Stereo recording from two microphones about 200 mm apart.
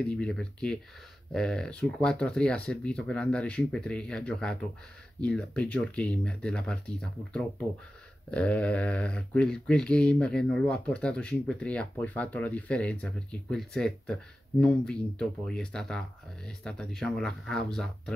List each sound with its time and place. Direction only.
0.0 s speech: 5° left (ahead or behind)